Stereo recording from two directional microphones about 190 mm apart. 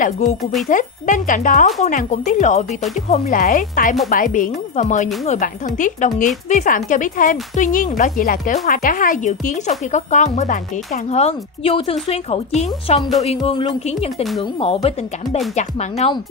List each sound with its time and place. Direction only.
0.0 s speech: 40° left (ahead or behind)